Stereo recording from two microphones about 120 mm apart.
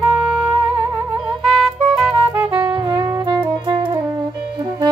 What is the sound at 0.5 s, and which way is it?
Music, 35° right (ahead or behind).